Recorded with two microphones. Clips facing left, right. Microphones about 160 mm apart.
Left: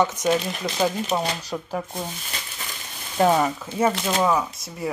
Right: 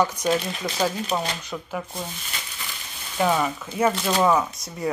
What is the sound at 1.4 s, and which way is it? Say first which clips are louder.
Speech: left 3 dB; 35° left (ahead or behind).